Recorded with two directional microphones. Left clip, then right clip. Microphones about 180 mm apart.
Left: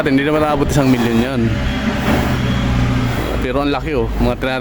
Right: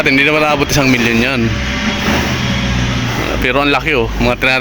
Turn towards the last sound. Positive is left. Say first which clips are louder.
# right 5 dB
turn(degrees=10)  # may be behind; listen again after turning